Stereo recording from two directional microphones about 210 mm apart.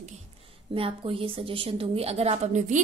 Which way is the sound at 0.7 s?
25° right (ahead or behind).